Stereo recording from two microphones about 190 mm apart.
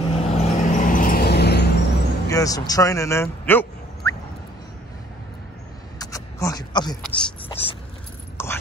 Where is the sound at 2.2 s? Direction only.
15° left (ahead or behind).